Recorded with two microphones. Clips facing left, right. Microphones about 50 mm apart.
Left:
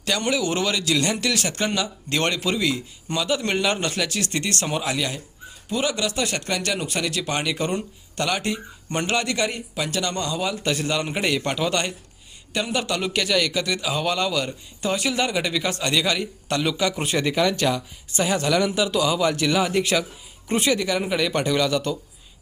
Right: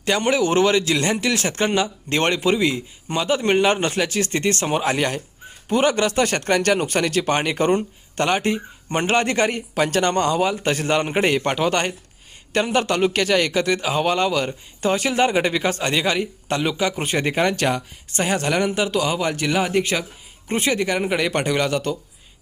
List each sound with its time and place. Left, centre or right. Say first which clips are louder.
0.0 s a man's voice: right 4 dB; right